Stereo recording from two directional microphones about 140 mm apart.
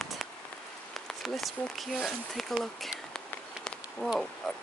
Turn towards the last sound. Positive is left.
turn(degrees=5)  # may be behind; listen again after turning